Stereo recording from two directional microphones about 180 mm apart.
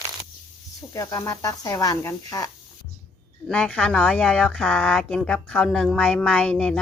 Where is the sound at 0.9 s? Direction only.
15° left (ahead or behind).